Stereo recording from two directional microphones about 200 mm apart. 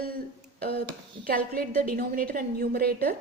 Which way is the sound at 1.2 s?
45° right (ahead or behind).